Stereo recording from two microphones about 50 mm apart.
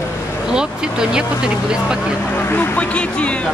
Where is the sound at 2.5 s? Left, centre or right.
Left.